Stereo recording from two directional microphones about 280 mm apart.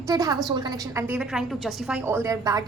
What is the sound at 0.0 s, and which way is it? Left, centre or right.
A woman's voice, centre.